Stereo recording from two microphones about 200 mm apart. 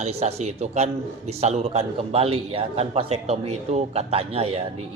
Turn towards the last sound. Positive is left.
turn(degrees=-30)  # may be behind; listen again after turning